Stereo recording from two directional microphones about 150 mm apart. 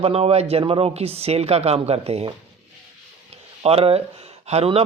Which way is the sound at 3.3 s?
40° right (ahead or behind).